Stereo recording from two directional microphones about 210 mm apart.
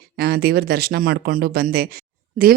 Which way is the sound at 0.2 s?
50° right (ahead or behind).